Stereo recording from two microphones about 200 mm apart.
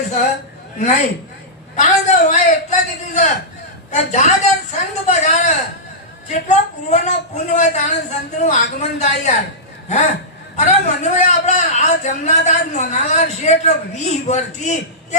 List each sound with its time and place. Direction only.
0.8 s a man's voice: 35° left (ahead or behind)
10.6 s a man's voice: 35° left (ahead or behind)